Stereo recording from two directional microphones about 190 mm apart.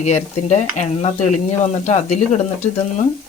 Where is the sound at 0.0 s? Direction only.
35° left (ahead or behind).